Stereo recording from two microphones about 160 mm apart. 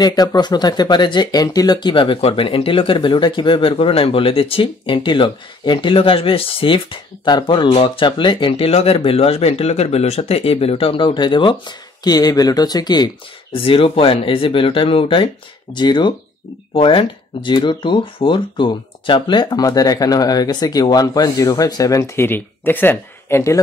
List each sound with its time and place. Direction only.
0.0 s speech: 25° left (ahead or behind)